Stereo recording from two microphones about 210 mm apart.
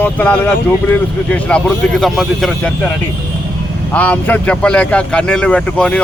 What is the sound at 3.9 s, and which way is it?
Speech, 5° left (ahead or behind).